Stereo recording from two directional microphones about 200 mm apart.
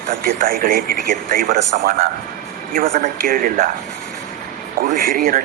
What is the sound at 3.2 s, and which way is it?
Speech, 45° right (ahead or behind).